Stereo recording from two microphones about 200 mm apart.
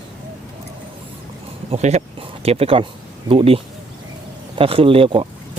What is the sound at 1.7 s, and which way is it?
Speech, 30° right (ahead or behind).